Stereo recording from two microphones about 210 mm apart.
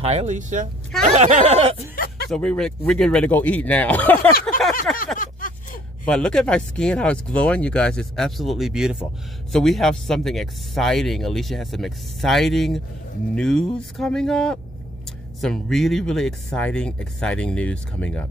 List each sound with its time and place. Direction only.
0.0 s speech: 30° right (ahead or behind)
2.2 s speech: 5° left (ahead or behind)
4.9 s a sound: 40° left (ahead or behind)
6.0 s speech: 5° left (ahead or behind)